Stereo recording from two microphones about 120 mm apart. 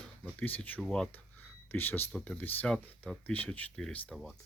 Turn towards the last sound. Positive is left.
turn(degrees=10)  # may be behind; listen again after turning